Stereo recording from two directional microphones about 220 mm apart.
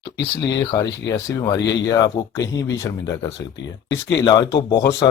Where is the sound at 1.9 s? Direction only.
15° left (ahead or behind).